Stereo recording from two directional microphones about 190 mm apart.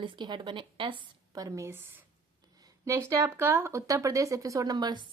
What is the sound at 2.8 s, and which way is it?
Speech, 15° right (ahead or behind).